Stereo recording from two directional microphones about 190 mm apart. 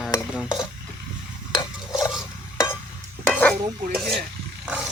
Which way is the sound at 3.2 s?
5° left (ahead or behind).